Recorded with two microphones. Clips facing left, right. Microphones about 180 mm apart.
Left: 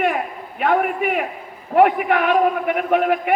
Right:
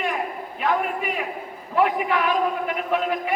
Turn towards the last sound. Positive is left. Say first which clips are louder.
# left 6 dB
turn(degrees=60)  # may be behind; listen again after turning